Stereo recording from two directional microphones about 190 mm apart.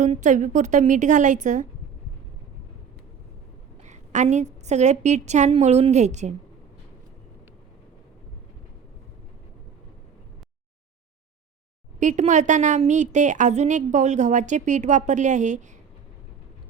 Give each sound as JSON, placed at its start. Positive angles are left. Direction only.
{"t": 0.0, "sound": "a woman's voice", "side_deg": -40}
{"t": 3.8, "sound": "a woman's voice", "side_deg": -40}
{"t": 11.9, "sound": "a woman's voice", "side_deg": -40}